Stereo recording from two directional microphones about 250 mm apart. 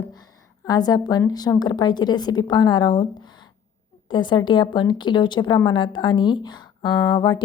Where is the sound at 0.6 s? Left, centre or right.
Centre.